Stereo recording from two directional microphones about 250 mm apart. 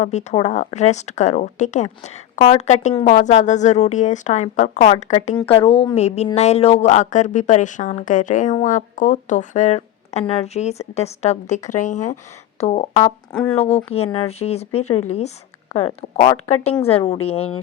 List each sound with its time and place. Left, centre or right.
0.0 s speech: left
12.5 s a sound: left
13.5 s speech: left